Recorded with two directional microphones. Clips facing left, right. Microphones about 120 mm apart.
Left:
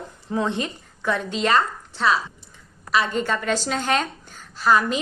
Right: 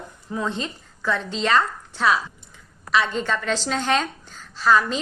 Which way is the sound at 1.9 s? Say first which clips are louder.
Even; centre (ahead or behind).